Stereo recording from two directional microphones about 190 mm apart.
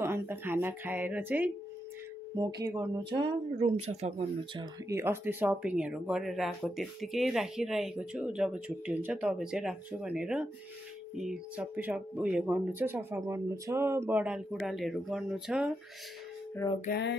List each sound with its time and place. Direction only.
0.0 s speech: 10° right (ahead or behind)
2.6 s speech: 20° right (ahead or behind)
3.2 s speech: 30° right (ahead or behind)
4.6 s speech: 15° right (ahead or behind)